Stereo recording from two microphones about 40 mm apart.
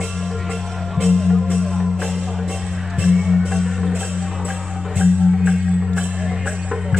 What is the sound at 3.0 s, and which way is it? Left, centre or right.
Music, centre.